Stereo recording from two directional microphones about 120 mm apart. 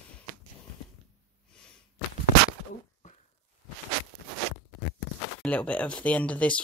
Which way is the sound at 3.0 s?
90° left.